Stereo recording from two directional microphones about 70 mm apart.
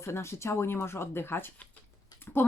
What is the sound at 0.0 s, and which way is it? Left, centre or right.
Speech, left.